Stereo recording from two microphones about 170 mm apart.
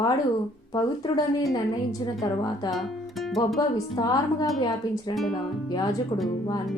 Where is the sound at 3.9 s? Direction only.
25° left (ahead or behind).